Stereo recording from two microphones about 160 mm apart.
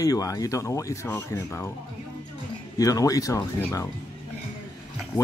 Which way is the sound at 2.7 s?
20° left (ahead or behind).